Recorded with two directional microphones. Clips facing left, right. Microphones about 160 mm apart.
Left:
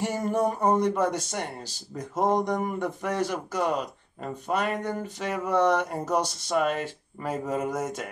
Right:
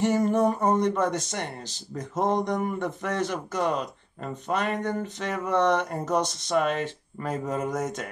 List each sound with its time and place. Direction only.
0.0 s speech: 10° left (ahead or behind)